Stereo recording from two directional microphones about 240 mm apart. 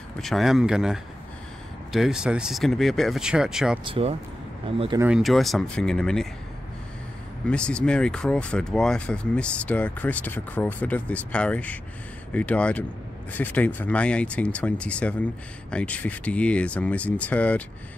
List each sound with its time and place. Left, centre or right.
0.2 s speech: centre
3.8 s speech: right
5.0 s speech: centre
7.4 s speech: centre